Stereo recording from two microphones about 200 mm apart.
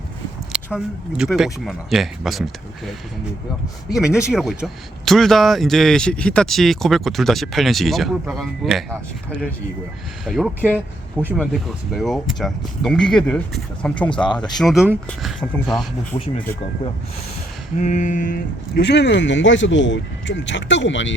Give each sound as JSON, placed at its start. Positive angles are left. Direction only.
{"t": 0.5, "sound": "speech", "side_deg": -5}
{"t": 10.2, "sound": "speech", "side_deg": 0}
{"t": 16.1, "sound": "speech", "side_deg": 25}
{"t": 17.7, "sound": "speech", "side_deg": 40}